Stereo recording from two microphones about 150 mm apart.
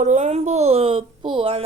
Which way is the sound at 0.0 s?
50° right (ahead or behind).